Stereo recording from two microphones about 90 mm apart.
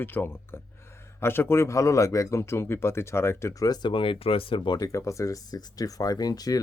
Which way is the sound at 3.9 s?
85° left.